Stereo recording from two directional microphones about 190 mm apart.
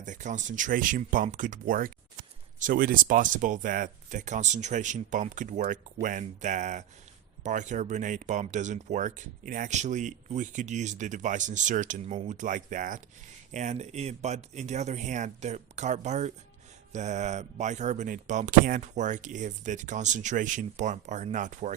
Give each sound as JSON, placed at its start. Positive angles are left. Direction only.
{"t": 0.0, "sound": "speech", "side_deg": -40}